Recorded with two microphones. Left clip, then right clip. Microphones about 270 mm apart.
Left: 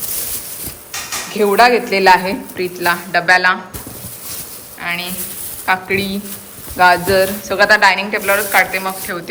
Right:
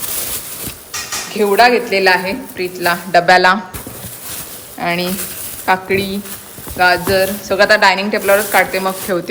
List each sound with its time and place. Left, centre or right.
1.3 s speech: centre
4.8 s speech: centre